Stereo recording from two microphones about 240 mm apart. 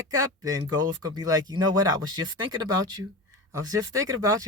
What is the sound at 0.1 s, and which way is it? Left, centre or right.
Speech, centre.